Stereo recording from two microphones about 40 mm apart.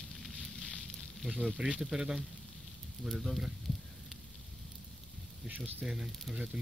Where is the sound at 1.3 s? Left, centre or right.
Right.